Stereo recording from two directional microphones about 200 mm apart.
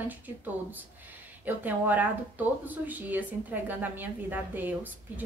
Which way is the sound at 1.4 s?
10° right (ahead or behind).